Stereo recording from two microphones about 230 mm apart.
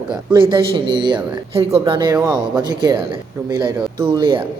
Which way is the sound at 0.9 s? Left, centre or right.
Centre.